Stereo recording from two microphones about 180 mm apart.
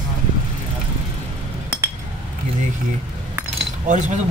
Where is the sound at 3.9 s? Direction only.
40° right (ahead or behind).